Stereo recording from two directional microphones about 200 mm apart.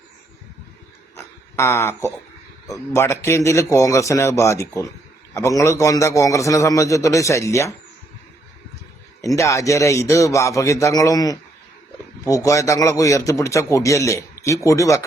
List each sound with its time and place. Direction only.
1.1 s a sound: 15° left (ahead or behind)
2.6 s a man's voice: 15° left (ahead or behind)
9.2 s a man's voice: 15° left (ahead or behind)